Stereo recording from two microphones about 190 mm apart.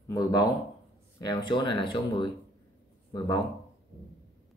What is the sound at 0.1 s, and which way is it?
Speech, 20° left (ahead or behind).